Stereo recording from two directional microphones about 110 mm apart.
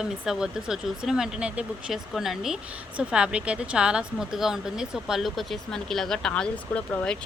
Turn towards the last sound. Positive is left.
turn(degrees=5)  # may be behind; listen again after turning